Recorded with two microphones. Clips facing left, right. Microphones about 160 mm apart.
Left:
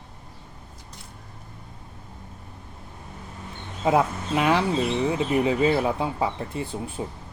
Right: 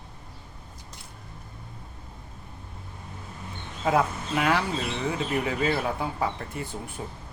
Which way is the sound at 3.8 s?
20° left (ahead or behind).